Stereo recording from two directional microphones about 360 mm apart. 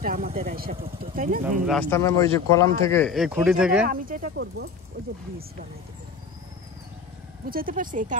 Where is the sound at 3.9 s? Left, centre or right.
Right.